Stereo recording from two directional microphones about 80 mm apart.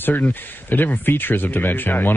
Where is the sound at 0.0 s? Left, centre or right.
Left.